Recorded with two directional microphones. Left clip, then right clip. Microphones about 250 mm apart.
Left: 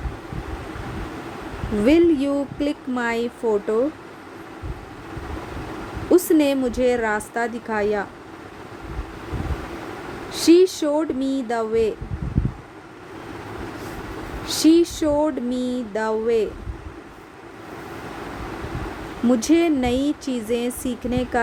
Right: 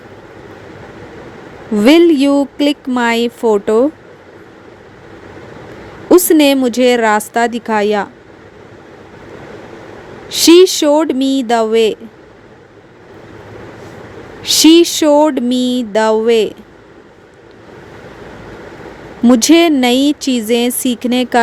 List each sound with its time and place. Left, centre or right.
1.8 s speech: right
6.1 s speech: right
10.2 s speech: right
14.4 s speech: right
19.3 s speech: right